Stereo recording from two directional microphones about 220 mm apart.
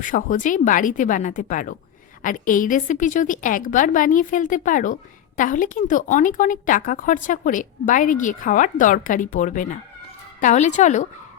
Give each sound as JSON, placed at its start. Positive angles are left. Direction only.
{"t": 0.0, "sound": "speech", "side_deg": 35}